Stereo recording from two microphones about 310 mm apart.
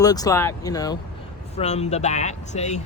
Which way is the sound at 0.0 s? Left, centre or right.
Centre.